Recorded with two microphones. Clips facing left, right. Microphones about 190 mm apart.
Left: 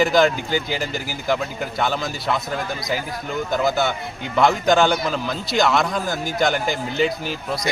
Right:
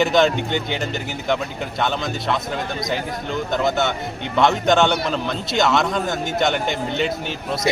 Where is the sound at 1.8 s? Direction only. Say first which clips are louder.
Right 1 dB; 5° left (ahead or behind).